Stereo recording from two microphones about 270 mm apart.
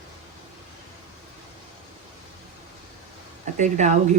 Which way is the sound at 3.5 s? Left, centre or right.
Right.